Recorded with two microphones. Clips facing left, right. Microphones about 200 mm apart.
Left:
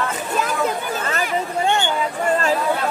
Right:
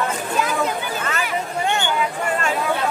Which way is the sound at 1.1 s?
35° left (ahead or behind).